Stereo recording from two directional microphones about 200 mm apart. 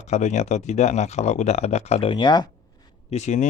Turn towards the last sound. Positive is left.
turn(degrees=35)  # may be behind; listen again after turning